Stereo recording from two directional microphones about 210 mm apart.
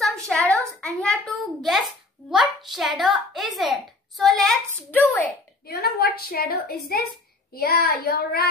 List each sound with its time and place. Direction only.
0.0 s a sound: 5° left (ahead or behind)
0.7 s a child's voice: 5° left (ahead or behind)
5.7 s a woman's voice: 50° left (ahead or behind)